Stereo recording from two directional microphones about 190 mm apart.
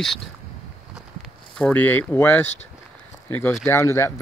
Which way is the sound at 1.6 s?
10° left (ahead or behind).